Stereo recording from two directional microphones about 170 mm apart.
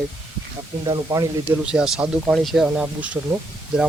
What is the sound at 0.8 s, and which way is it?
Speech, 20° right (ahead or behind).